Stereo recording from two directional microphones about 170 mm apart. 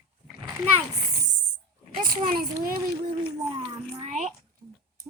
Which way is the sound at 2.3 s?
60° right (ahead or behind).